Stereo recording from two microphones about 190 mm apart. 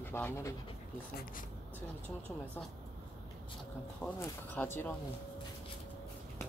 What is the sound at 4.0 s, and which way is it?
Speech, 10° left (ahead or behind).